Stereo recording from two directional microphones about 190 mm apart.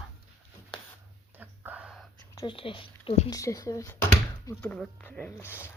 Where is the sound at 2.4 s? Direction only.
25° left (ahead or behind).